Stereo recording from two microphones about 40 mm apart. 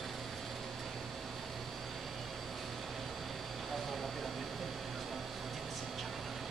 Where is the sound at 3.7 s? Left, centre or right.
Centre.